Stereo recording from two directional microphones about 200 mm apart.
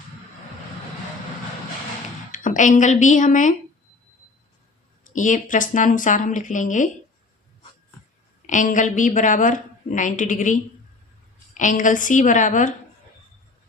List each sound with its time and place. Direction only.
2.3 s a woman's voice: 40° left (ahead or behind)
5.1 s a woman's voice: 40° left (ahead or behind)
8.4 s a woman's voice: 40° left (ahead or behind)